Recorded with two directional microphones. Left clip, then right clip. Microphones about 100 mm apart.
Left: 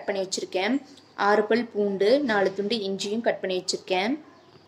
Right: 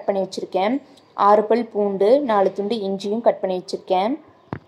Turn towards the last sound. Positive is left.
turn(degrees=-25)  # may be behind; listen again after turning